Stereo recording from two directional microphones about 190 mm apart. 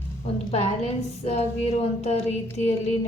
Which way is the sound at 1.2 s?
35° left (ahead or behind).